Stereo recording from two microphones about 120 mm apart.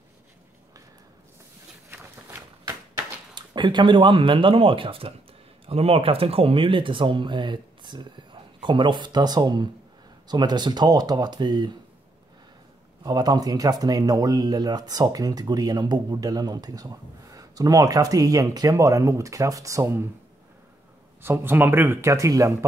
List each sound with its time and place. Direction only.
1.9 s a sound: 20° right (ahead or behind)
3.3 s speech: 40° right (ahead or behind)
13.0 s speech: 35° right (ahead or behind)
21.2 s speech: 20° right (ahead or behind)